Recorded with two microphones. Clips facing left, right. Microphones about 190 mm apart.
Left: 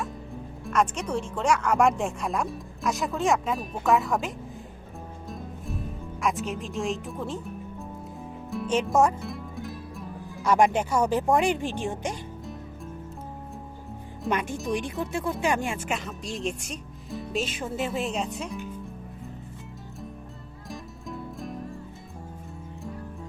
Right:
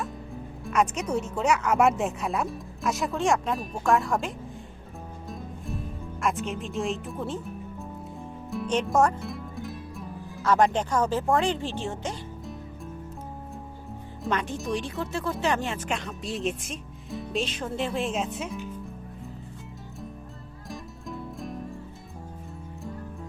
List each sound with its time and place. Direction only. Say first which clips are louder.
0.6 s speech: even; 5° right (ahead or behind)
5.3 s music: even; centre (ahead or behind)
10.4 s speech: left 1 dB; 10° left (ahead or behind)
14.3 s speech: left 1 dB; centre (ahead or behind)
14.7 s speech: left 2 dB; 15° left (ahead or behind); by 18.6 s centre (ahead or behind)
20.7 s music: even; centre (ahead or behind)